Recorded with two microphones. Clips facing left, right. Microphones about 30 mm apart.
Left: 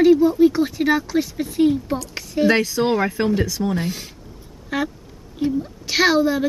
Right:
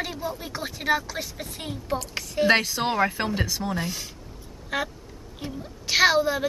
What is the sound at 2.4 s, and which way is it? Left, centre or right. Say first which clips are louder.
Speech: left 4 dB; centre.